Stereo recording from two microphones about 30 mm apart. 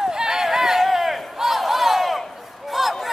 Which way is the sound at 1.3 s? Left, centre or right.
Centre.